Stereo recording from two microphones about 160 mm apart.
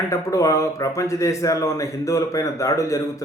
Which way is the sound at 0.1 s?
20° left (ahead or behind).